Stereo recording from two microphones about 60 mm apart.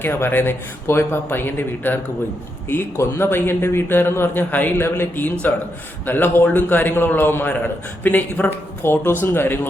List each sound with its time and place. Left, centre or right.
0.0 s a man's voice: left
3.0 s a man's voice: left